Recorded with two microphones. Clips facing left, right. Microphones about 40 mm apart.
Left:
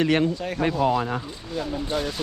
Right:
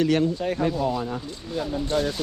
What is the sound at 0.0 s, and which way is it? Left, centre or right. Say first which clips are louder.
Speech: even; left.